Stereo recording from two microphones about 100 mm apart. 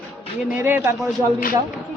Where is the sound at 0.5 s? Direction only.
20° right (ahead or behind).